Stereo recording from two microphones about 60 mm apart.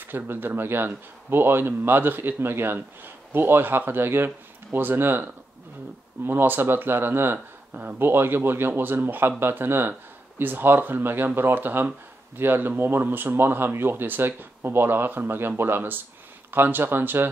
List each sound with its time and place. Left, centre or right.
0.0 s speech: right